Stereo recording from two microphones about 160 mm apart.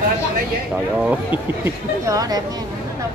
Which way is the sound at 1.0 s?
10° right (ahead or behind).